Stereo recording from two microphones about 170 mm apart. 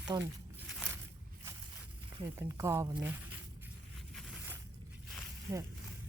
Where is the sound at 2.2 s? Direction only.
20° right (ahead or behind).